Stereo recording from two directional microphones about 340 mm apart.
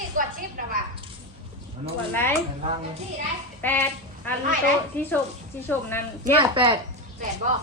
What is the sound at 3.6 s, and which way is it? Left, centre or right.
Speech, centre.